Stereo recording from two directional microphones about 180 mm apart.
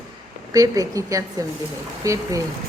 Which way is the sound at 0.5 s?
20° right (ahead or behind).